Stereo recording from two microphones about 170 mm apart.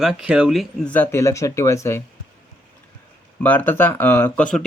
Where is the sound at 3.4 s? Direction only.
10° left (ahead or behind).